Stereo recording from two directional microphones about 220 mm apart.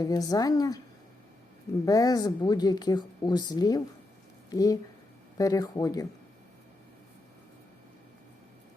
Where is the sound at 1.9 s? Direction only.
15° left (ahead or behind).